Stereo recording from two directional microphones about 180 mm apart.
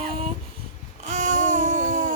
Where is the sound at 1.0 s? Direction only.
45° right (ahead or behind).